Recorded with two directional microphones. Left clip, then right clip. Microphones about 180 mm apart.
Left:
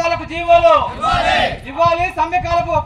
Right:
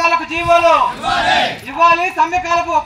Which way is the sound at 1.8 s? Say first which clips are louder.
Right 3 dB; 50° left (ahead or behind).